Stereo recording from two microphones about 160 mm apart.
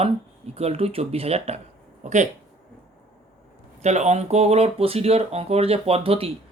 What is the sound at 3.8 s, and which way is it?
Speech, 45° right (ahead or behind).